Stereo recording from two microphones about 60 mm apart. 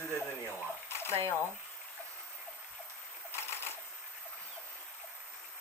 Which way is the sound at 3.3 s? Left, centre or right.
Left.